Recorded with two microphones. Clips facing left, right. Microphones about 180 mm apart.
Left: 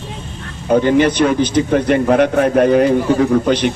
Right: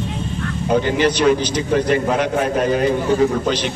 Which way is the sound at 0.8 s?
55° left (ahead or behind).